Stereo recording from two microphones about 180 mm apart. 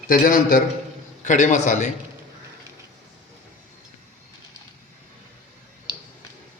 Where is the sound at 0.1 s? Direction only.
50° left (ahead or behind).